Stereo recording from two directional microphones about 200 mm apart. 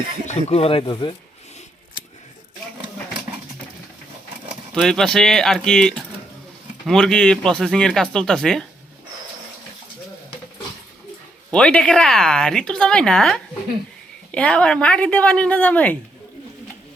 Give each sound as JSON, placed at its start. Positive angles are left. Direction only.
{"t": 0.3, "sound": "speech", "side_deg": 30}
{"t": 4.7, "sound": "speech", "side_deg": 0}
{"t": 11.5, "sound": "speech", "side_deg": 5}